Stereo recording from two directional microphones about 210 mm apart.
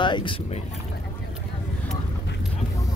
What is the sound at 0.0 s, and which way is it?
Speech, 25° left (ahead or behind).